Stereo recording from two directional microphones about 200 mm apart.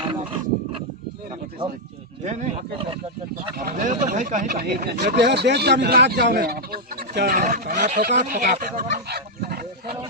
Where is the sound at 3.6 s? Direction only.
45° right (ahead or behind).